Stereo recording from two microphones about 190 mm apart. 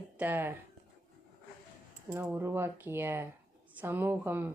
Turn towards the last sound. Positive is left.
turn(degrees=-10)  # may be behind; listen again after turning